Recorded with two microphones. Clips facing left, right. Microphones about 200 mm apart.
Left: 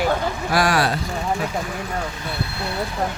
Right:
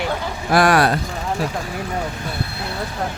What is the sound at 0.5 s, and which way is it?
Speech, 55° right (ahead or behind).